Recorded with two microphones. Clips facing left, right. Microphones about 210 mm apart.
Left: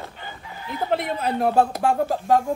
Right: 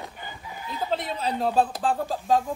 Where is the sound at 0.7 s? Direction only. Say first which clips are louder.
Left 4 dB; 65° left (ahead or behind).